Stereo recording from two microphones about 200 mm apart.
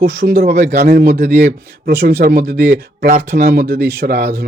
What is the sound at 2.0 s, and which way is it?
Speech, 55° right (ahead or behind).